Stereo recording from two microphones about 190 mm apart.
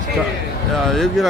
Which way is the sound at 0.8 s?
Centre (ahead or behind).